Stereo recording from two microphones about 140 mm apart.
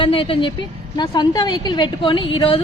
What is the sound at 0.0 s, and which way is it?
A woman's voice, 40° left (ahead or behind).